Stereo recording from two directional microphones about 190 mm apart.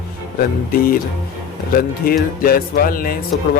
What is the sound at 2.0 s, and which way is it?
Speech, 50° left (ahead or behind).